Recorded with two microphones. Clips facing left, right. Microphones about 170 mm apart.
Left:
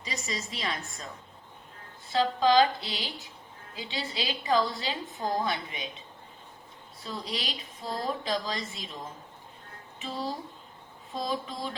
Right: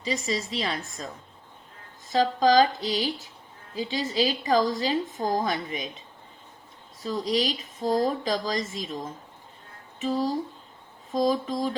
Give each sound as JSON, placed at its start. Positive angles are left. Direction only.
{"t": 0.0, "sound": "speech", "side_deg": -30}
{"t": 2.1, "sound": "a woman's voice", "side_deg": -40}
{"t": 7.0, "sound": "speech", "side_deg": -40}